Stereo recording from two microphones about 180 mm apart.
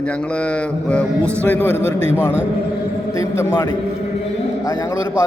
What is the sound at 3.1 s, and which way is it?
A man's voice, 15° left (ahead or behind).